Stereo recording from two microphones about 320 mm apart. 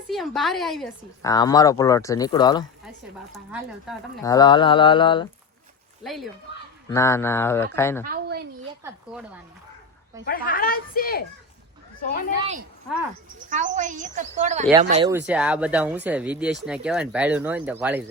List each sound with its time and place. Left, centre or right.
0.1 s speech: centre
1.3 s speech: centre
3.3 s speech: centre
4.2 s speech: centre
6.0 s speech: centre
8.0 s a sound: right
8.8 s speech: centre
10.2 s speech: left
12.4 s speech: right
15.1 s speech: centre